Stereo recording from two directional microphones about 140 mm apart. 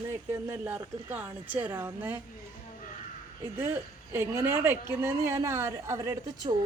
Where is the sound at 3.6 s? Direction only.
15° right (ahead or behind).